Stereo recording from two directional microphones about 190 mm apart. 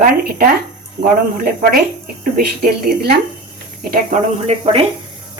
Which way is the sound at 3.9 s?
45° right (ahead or behind).